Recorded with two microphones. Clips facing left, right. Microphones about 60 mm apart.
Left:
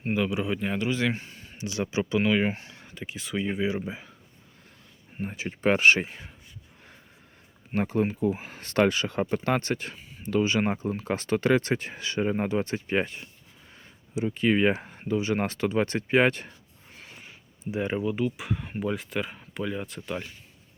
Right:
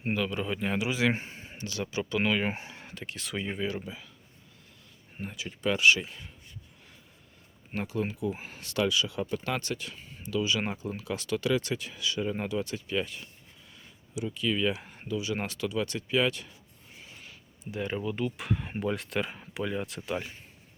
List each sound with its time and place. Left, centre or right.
0.1 s a man's voice: centre
0.8 s a man's voice: centre
1.1 s a sound: right
1.6 s speech: left
2.1 s a man's voice: centre
2.5 s speech: right
2.8 s speech: centre
3.6 s speech: centre
5.2 s speech: left
7.8 s speech: left
17.2 s speech: left; by 20.2 s centre